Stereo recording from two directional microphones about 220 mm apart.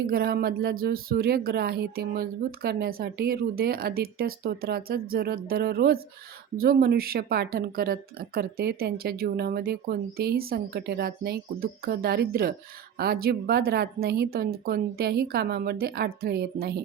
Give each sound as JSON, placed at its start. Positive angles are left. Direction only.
{"t": 0.0, "sound": "speech", "side_deg": -45}